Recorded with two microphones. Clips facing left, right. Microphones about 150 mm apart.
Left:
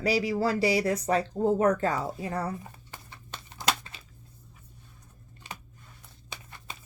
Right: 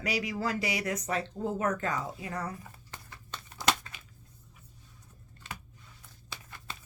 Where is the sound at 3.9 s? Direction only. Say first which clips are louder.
Left 2 dB; 30° left (ahead or behind).